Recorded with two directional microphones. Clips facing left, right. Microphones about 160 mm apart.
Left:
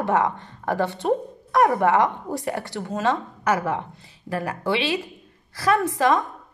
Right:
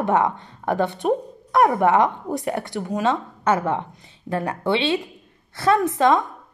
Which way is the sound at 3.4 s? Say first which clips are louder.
Right 3 dB; 25° right (ahead or behind).